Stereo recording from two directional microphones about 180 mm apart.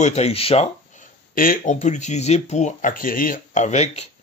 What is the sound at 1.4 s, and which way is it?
A man's voice, 50° left (ahead or behind).